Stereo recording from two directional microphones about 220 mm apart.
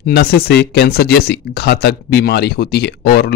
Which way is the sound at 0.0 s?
45° left (ahead or behind).